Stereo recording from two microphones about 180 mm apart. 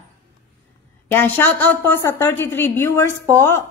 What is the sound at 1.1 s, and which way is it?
A woman's voice, 10° left (ahead or behind).